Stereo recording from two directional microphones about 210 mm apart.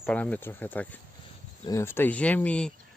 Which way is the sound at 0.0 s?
5° left (ahead or behind).